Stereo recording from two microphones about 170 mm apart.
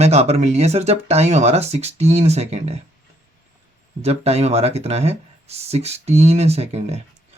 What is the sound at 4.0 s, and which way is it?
Speech, 40° right (ahead or behind).